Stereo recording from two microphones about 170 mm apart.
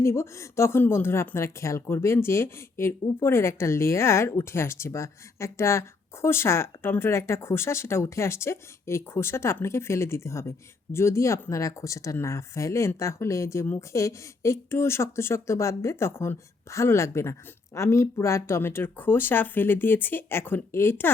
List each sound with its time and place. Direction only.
0.0 s speech: 15° left (ahead or behind)